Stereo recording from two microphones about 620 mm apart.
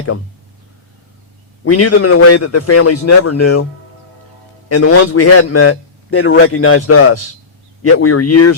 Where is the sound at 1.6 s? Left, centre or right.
Left.